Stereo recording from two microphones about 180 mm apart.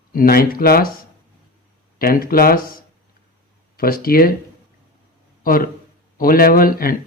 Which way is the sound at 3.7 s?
55° left (ahead or behind).